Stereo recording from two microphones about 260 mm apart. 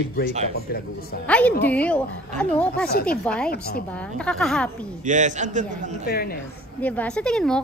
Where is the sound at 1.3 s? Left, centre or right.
Centre.